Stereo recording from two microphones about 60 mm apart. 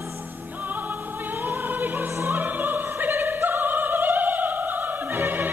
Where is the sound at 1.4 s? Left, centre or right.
Right.